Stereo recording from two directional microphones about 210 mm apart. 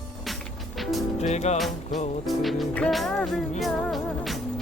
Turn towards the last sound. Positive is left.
turn(degrees=0)  # may be behind; listen again after turning